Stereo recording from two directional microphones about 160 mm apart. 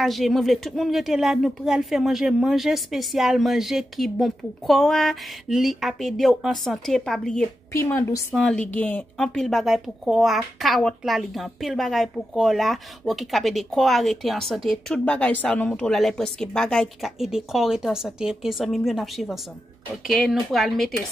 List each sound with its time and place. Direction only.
0.0 s a woman's voice: centre (ahead or behind)
7.7 s a woman's voice: 15° left (ahead or behind); by 20.9 s centre (ahead or behind)